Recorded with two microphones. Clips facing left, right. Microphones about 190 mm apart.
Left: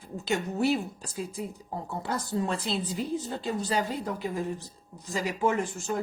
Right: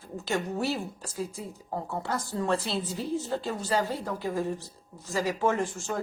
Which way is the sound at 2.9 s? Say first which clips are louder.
Right 1 dB; 15° left (ahead or behind).